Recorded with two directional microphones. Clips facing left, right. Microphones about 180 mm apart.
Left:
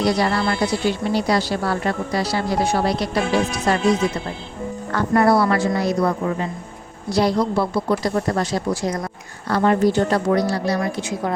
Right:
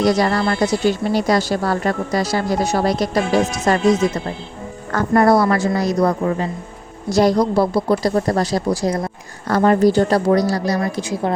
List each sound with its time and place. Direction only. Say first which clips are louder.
0.0 s speech: right 3 dB; 45° right (ahead or behind)
4.9 s a woman's voice: right 3 dB; 45° right (ahead or behind)